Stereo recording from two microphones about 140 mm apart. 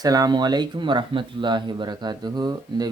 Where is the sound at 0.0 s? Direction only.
25° right (ahead or behind).